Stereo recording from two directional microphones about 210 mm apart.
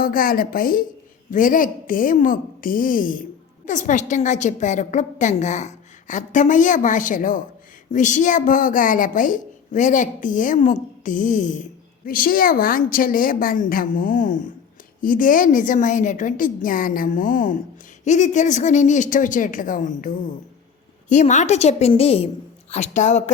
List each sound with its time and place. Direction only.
0.0 s a woman's voice: 45° left (ahead or behind)